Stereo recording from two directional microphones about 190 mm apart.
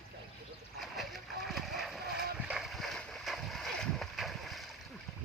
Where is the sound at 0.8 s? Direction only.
Centre (ahead or behind).